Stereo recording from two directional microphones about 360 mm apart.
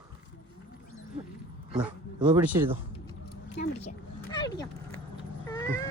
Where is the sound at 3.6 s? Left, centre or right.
Left.